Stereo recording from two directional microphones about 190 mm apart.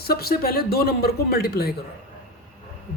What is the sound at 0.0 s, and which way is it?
Speech, 55° left (ahead or behind).